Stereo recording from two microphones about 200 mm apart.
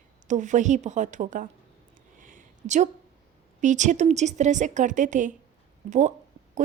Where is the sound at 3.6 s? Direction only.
35° right (ahead or behind).